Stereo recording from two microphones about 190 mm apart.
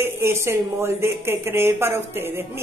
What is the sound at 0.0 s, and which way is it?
Speech, 15° right (ahead or behind).